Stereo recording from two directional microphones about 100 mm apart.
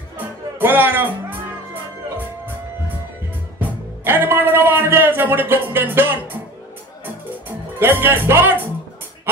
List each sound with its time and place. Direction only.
0.6 s music: 20° right (ahead or behind)
4.0 s a sound: 20° right (ahead or behind)
7.8 s speech: 20° right (ahead or behind)